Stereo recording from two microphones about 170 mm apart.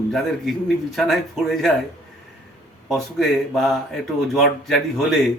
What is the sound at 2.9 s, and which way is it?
Speech, centre (ahead or behind).